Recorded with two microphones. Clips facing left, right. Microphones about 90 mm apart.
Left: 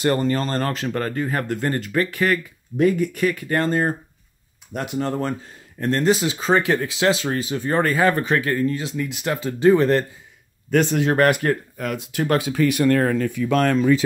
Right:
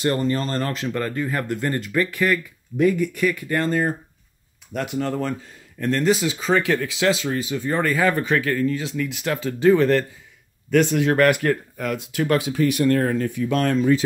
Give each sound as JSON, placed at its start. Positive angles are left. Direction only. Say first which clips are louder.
{"t": 0.0, "sound": "speech", "louder": "left 2 dB", "side_deg": 55}
{"t": 0.9, "sound": "speech", "louder": "left 1 dB", "side_deg": 35}
{"t": 3.3, "sound": "speech", "louder": "left 1 dB", "side_deg": 50}
{"t": 4.7, "sound": "speech", "louder": "even", "side_deg": 30}
{"t": 8.5, "sound": "speech", "louder": "even", "side_deg": 25}
{"t": 12.8, "sound": "speech", "louder": "left 2 dB", "side_deg": 90}